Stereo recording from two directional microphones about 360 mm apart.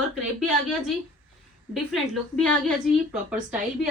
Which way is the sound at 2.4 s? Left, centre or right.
Centre.